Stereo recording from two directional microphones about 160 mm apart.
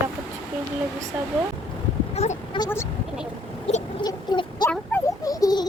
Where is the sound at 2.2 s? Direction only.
40° left (ahead or behind).